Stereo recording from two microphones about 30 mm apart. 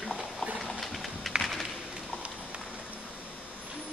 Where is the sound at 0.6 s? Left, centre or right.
Centre.